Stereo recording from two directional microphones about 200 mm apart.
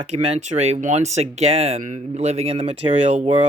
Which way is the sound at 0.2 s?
35° right (ahead or behind).